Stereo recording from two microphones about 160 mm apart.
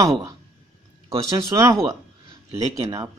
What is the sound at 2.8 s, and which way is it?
Speech, 20° right (ahead or behind).